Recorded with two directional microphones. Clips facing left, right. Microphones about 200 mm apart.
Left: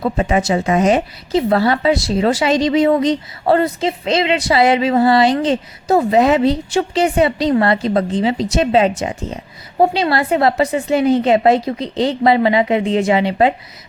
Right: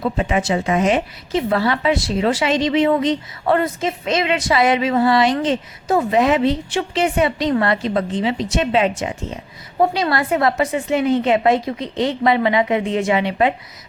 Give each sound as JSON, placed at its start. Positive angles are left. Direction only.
{"t": 0.0, "sound": "a woman's voice", "side_deg": 40}